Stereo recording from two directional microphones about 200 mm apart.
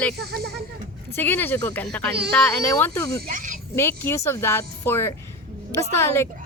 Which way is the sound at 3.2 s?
40° right (ahead or behind).